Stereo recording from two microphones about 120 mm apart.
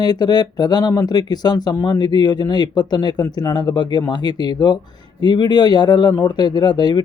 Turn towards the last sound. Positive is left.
turn(degrees=35)  # may be behind; listen again after turning